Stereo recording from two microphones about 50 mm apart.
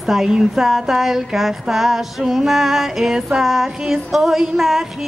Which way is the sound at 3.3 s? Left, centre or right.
Centre.